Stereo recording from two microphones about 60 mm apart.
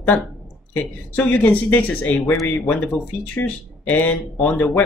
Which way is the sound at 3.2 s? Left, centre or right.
Left.